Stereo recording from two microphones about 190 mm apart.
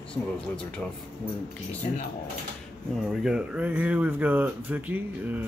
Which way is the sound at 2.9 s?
Centre (ahead or behind).